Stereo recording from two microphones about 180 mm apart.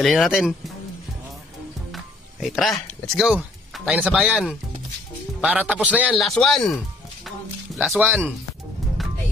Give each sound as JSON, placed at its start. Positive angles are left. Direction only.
{"t": 0.0, "sound": "speech", "side_deg": 0}
{"t": 2.4, "sound": "a man's voice", "side_deg": 0}
{"t": 6.1, "sound": "speech", "side_deg": 5}
{"t": 7.2, "sound": "a sound", "side_deg": 0}